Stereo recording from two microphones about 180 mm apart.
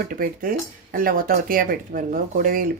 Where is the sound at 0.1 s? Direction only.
50° right (ahead or behind).